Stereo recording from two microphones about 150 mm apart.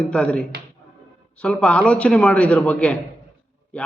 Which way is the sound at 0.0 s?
5° left (ahead or behind).